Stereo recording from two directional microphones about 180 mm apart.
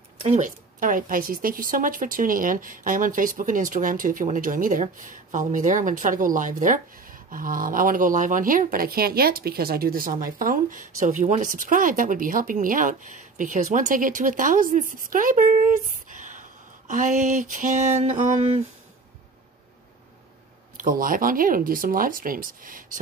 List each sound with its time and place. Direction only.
0.2 s a woman's voice: 40° right (ahead or behind)
20.7 s a woman's voice: 50° right (ahead or behind)